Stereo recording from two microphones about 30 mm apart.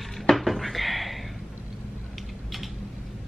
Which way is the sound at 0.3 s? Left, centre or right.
Centre.